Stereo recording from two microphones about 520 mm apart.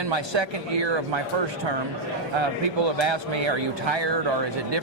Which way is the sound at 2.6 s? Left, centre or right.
Right.